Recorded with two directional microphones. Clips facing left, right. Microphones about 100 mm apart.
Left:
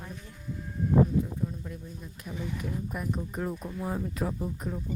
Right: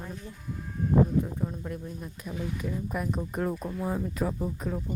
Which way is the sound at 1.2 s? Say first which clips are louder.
Right 1 dB; 60° right (ahead or behind).